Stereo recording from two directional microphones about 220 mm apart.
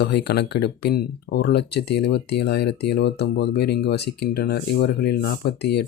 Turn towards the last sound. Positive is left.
turn(degrees=50)  # may be behind; listen again after turning